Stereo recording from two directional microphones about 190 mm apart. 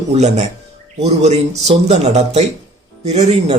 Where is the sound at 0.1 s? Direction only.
35° right (ahead or behind).